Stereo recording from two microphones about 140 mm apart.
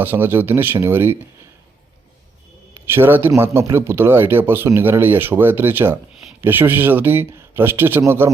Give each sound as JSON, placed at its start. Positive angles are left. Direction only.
{"t": 0.0, "sound": "speech", "side_deg": -15}
{"t": 2.9, "sound": "speech", "side_deg": -15}